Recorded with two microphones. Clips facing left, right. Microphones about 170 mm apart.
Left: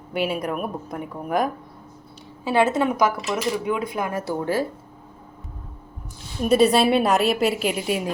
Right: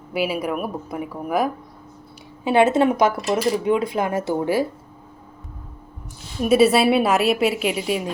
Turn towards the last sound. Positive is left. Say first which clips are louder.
# right 1 dB
turn(degrees=0)  # may be behind; listen again after turning